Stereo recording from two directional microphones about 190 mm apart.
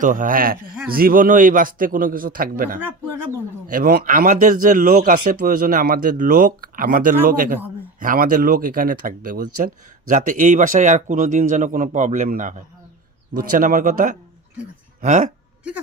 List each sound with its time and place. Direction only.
0.0 s speech: 45° right (ahead or behind)
2.8 s speech: 10° right (ahead or behind)
3.7 s speech: 50° right (ahead or behind)